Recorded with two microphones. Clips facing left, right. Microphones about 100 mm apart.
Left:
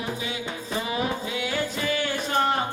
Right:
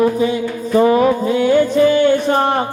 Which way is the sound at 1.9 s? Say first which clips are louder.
Right 15 dB; 30° right (ahead or behind).